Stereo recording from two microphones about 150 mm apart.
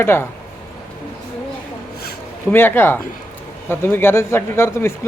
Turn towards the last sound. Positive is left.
turn(degrees=15)  # may be behind; listen again after turning